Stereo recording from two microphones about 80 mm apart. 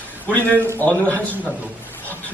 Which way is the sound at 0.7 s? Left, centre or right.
Centre.